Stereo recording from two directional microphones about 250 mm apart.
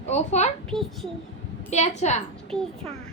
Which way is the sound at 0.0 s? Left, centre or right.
Left.